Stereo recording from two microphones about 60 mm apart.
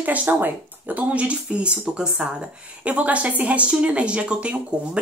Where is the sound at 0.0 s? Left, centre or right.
Right.